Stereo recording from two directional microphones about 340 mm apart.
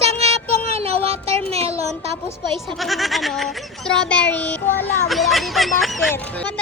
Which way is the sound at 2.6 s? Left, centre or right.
Centre.